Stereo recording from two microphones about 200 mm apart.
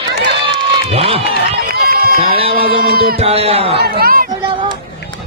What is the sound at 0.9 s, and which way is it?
Speech, 30° right (ahead or behind).